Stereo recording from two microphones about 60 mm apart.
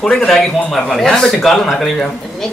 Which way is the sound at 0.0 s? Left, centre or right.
Centre.